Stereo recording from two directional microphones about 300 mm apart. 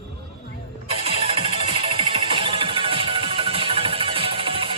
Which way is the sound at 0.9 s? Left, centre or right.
Centre.